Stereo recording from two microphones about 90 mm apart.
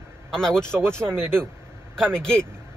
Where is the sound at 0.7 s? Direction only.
25° right (ahead or behind).